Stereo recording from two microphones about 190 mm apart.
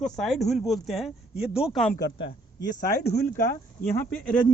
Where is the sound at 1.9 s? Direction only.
60° left (ahead or behind).